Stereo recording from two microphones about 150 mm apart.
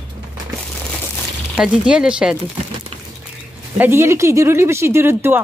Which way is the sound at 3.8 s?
15° right (ahead or behind).